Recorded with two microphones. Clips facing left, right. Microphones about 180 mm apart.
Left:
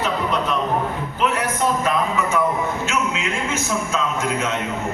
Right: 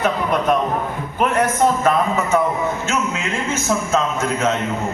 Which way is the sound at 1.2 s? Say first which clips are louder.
Right 5 dB; 50° right (ahead or behind).